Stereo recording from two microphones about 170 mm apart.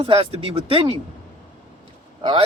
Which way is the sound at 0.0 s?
30° right (ahead or behind).